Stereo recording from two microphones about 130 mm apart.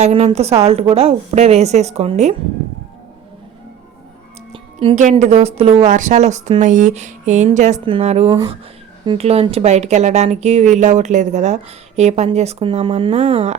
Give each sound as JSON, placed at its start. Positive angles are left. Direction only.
{"t": 0.0, "sound": "a woman's voice", "side_deg": -45}
{"t": 4.5, "sound": "music", "side_deg": -45}
{"t": 5.2, "sound": "a woman's voice", "side_deg": -55}
{"t": 5.8, "sound": "a woman's voice", "side_deg": -70}
{"t": 6.6, "sound": "a woman's voice", "side_deg": -75}